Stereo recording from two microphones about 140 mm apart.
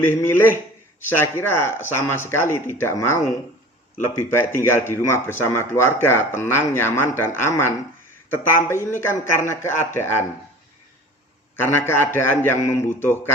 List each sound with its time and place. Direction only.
0.1 s speech: 15° left (ahead or behind)
11.6 s speech: 15° left (ahead or behind)